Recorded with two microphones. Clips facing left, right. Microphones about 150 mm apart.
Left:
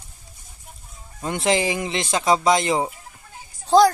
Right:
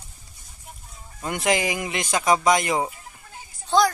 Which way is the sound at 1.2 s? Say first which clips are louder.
Left 2 dB; 25° left (ahead or behind).